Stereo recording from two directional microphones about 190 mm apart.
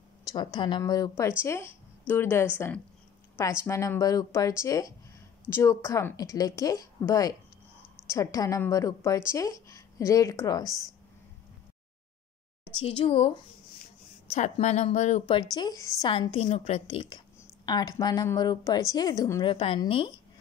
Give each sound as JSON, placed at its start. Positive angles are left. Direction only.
{"t": 0.3, "sound": "a woman's voice", "side_deg": 20}
{"t": 12.8, "sound": "a woman's voice", "side_deg": 30}
{"t": 14.3, "sound": "a woman's voice", "side_deg": 35}
{"t": 15.2, "sound": "a woman's voice", "side_deg": 25}